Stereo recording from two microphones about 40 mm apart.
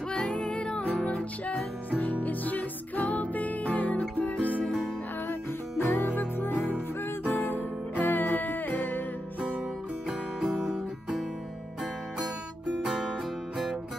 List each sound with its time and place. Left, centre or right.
0.1 s music: left
5.3 s music: left
10.4 s guitar: centre
12.8 s music: centre